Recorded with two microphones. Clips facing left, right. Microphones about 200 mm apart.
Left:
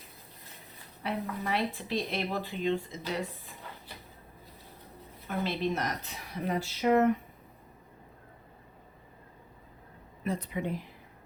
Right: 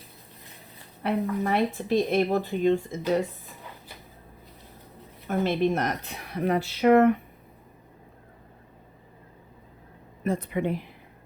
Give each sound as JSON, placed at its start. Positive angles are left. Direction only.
{"t": 1.0, "sound": "speech", "side_deg": -50}
{"t": 5.3, "sound": "speech", "side_deg": -50}
{"t": 10.2, "sound": "speech", "side_deg": -50}